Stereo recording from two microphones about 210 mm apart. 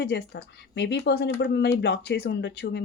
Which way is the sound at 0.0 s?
55° left (ahead or behind).